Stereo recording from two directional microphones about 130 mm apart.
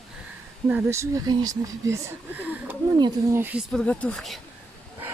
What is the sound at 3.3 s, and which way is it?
Speech, 15° right (ahead or behind).